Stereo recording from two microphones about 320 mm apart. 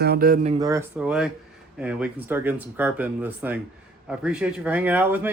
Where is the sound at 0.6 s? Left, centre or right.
Centre.